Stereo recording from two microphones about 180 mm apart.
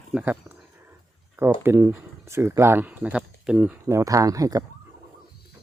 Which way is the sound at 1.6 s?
15° right (ahead or behind).